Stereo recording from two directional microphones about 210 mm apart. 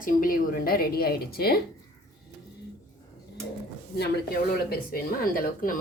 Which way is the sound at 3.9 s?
50° left (ahead or behind).